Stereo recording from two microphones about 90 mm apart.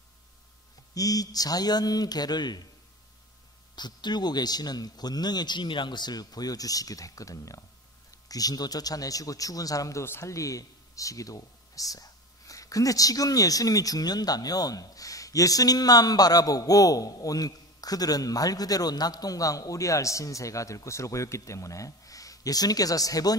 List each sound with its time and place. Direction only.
0.9 s speech: 40° left (ahead or behind)
3.7 s a man's voice: 55° left (ahead or behind)